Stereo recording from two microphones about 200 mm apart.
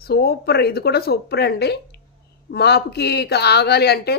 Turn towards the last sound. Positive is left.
turn(degrees=55)  # may be behind; listen again after turning